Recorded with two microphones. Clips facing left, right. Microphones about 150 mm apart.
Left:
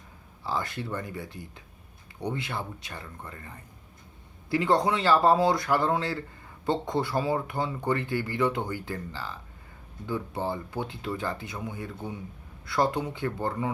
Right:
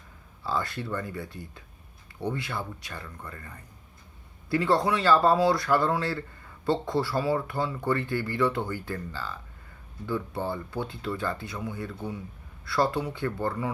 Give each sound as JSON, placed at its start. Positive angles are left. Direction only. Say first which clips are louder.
{"t": 0.4, "sound": "speech", "louder": "right 1 dB", "side_deg": 20}